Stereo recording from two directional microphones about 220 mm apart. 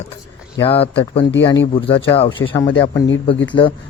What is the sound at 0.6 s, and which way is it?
Speech, 25° left (ahead or behind).